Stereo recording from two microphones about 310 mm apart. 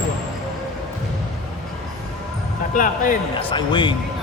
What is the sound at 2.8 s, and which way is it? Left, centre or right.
A man's voice, left.